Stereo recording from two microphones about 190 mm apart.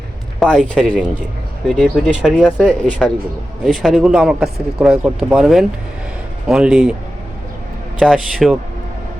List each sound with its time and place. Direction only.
0.3 s speech: 5° left (ahead or behind)
7.9 s speech: centre (ahead or behind)